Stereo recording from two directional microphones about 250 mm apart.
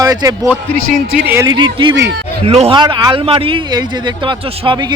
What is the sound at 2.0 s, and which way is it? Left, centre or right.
Speech, right.